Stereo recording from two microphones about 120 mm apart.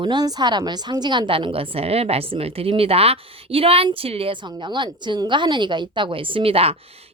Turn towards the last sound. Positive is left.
turn(degrees=-55)  # may be behind; listen again after turning